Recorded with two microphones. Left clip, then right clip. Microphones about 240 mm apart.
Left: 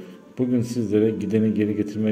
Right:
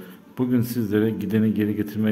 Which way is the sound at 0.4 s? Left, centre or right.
Centre.